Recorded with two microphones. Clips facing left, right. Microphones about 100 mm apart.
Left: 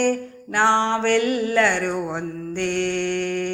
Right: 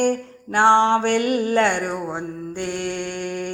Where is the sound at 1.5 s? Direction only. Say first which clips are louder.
Even; 25° right (ahead or behind).